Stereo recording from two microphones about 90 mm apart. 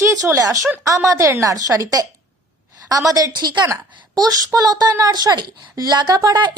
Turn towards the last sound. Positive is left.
turn(degrees=-50)  # may be behind; listen again after turning